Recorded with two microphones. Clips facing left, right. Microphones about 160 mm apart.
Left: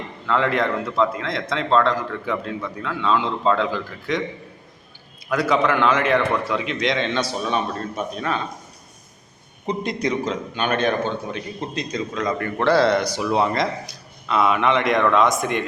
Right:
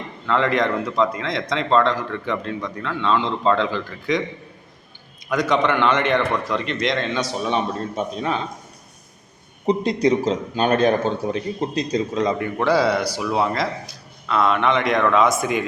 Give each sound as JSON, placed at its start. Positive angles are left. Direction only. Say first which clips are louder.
{"t": 0.3, "sound": "a man's voice", "louder": "right 1 dB", "side_deg": 0}
{"t": 5.3, "sound": "a man's voice", "louder": "even", "side_deg": 5}
{"t": 7.1, "sound": "a man's voice", "louder": "even", "side_deg": -15}
{"t": 9.6, "sound": "a man's voice", "louder": "right 6 dB", "side_deg": -35}
{"t": 12.4, "sound": "a man's voice", "louder": "left 5 dB", "side_deg": -10}